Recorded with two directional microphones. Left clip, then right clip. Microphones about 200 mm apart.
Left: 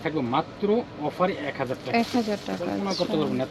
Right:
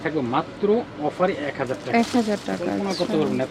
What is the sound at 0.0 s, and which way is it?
Speech, 20° left (ahead or behind).